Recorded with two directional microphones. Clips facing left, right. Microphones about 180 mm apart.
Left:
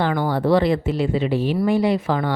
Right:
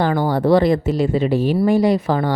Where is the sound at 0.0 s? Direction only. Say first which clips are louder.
Right 3 dB; 40° right (ahead or behind).